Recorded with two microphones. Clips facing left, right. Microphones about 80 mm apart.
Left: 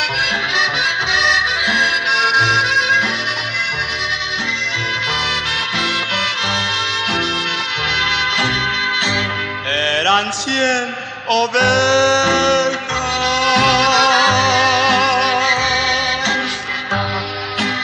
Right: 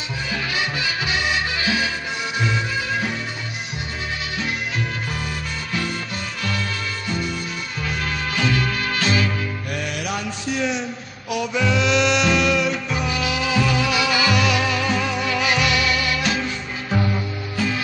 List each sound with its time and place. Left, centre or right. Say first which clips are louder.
1.1 s music: left 8 dB; left
9.8 s mantra: left 13 dB; left
11.2 s music: left 8 dB; left